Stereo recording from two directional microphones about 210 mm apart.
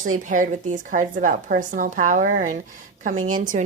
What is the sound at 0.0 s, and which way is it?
A woman's voice, 40° right (ahead or behind).